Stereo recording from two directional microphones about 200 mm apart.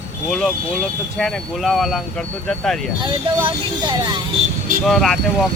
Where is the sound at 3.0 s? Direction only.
25° right (ahead or behind).